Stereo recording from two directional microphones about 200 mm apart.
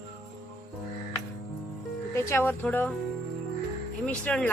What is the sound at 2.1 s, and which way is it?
Speech, 15° left (ahead or behind).